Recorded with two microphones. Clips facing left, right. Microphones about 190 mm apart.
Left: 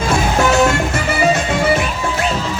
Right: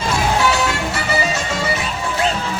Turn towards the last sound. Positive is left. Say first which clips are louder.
# left 6 dB
turn(degrees=55)  # may be behind; listen again after turning